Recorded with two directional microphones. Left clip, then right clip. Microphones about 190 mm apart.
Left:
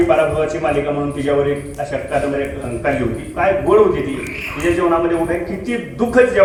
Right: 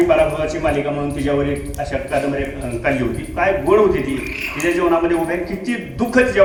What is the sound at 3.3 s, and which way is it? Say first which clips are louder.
Speech: left 2 dB; 55° right (ahead or behind).